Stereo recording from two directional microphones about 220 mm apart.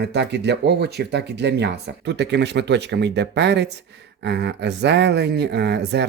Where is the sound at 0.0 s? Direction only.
50° right (ahead or behind).